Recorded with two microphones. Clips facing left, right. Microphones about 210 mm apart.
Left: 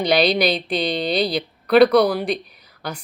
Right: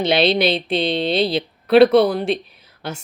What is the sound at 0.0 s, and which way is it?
Speech, 25° right (ahead or behind).